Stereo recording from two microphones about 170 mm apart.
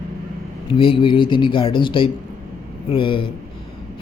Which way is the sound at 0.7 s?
30° left (ahead or behind).